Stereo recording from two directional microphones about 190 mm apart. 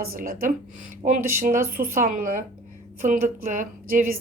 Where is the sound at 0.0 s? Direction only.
50° right (ahead or behind).